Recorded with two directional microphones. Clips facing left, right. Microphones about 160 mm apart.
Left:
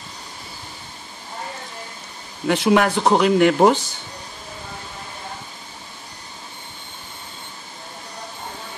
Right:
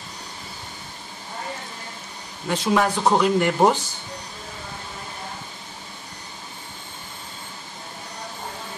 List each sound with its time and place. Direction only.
2.4 s speech: 70° left (ahead or behind)